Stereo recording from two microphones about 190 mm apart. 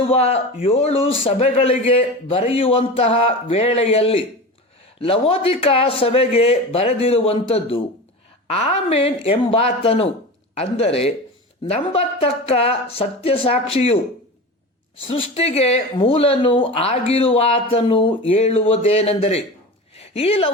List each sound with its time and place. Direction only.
0.0 s speech: 30° left (ahead or behind)
15.0 s speech: 30° left (ahead or behind)